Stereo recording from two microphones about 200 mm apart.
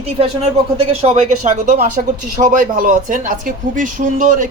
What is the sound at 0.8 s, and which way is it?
Speech, 30° right (ahead or behind).